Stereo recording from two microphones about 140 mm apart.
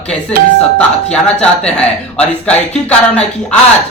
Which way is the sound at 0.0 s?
10° left (ahead or behind).